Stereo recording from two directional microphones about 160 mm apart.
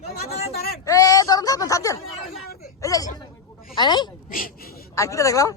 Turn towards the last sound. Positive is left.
turn(degrees=20)  # may be behind; listen again after turning